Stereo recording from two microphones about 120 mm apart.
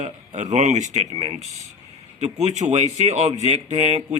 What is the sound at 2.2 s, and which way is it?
Speech, 65° right (ahead or behind).